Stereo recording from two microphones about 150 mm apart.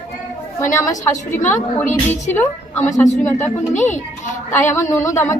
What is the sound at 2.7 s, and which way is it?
Speech, 55° left (ahead or behind).